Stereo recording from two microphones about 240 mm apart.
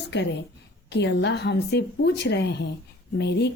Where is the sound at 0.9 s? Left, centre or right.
Left.